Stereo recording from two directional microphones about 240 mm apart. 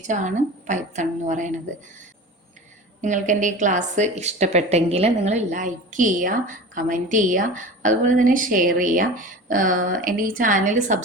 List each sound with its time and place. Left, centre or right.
0.0 s a woman's voice: right
3.0 s a woman's voice: right